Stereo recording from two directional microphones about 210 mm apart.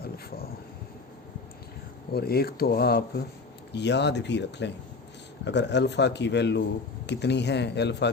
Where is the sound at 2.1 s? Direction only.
45° left (ahead or behind).